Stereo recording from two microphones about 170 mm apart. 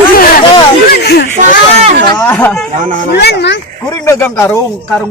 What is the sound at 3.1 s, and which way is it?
Speech, 80° left.